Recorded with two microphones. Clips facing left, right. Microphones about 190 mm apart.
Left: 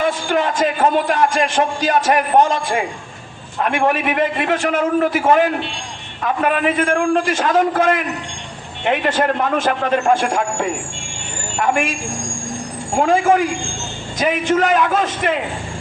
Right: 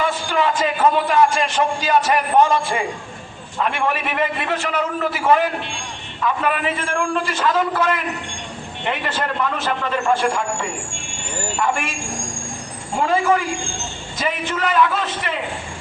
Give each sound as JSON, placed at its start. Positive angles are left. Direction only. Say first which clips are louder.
{"t": 0.0, "sound": "a man's voice", "louder": "left 2 dB", "side_deg": 45}
{"t": 13.0, "sound": "a man's voice", "louder": "left 4 dB", "side_deg": 50}